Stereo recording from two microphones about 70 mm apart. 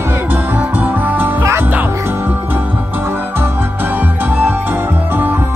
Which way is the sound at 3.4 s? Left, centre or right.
Right.